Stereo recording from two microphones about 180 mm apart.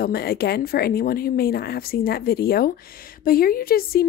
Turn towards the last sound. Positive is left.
turn(degrees=55)  # may be behind; listen again after turning